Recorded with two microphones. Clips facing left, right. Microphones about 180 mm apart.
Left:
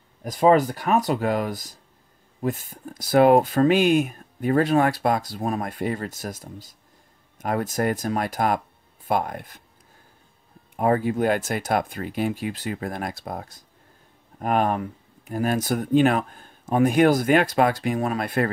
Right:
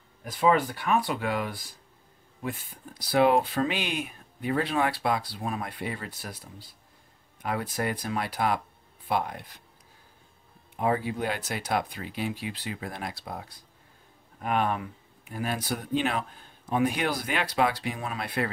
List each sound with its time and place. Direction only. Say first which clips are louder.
0.2 s speech: left 6 dB; 40° left (ahead or behind)
10.8 s speech: left 6 dB; 50° left (ahead or behind)